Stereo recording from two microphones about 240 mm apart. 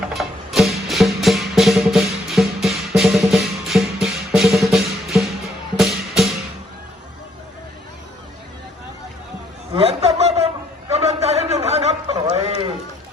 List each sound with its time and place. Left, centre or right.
0.1 s music: centre
9.7 s chuckle: right
10.9 s a sound: right